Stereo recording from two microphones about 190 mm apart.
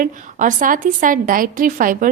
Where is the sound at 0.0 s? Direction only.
45° right (ahead or behind).